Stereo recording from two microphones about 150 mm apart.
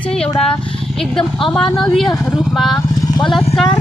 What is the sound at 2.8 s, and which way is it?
Vehicle, 25° left (ahead or behind).